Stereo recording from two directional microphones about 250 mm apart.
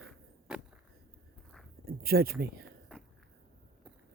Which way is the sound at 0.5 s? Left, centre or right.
Centre.